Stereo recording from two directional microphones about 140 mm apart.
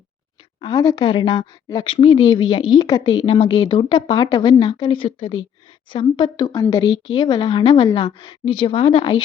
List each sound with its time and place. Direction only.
0.6 s a woman's voice: 25° left (ahead or behind)